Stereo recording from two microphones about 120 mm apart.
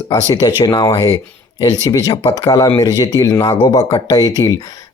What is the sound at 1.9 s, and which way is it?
Speech, 30° left (ahead or behind).